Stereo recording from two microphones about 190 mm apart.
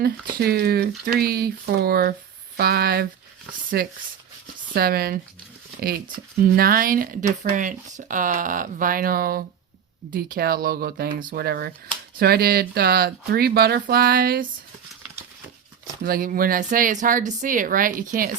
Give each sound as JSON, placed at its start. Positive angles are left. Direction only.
{"t": 0.0, "sound": "speech", "side_deg": -55}
{"t": 6.4, "sound": "speech", "side_deg": -50}
{"t": 16.0, "sound": "speech", "side_deg": -50}